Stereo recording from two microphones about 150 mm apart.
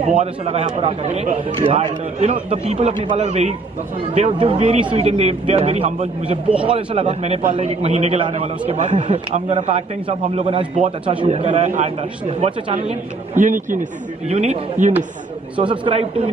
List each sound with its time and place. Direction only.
0.0 s a man's voice: 45° right (ahead or behind)
14.3 s a man's voice: 45° right (ahead or behind)
15.6 s a man's voice: 35° right (ahead or behind)